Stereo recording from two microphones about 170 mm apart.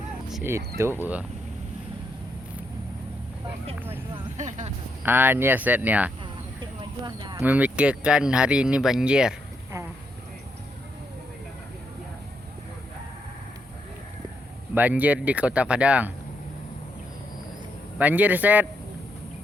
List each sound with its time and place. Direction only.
0.8 s speech: 15° right (ahead or behind)
4.4 s speech: 45° right (ahead or behind)
5.0 s speech: 10° right (ahead or behind)
6.6 s a sound: 25° right (ahead or behind)
7.4 s speech: 10° right (ahead or behind)
14.8 s speech: 10° right (ahead or behind)
17.9 s speech: 10° right (ahead or behind)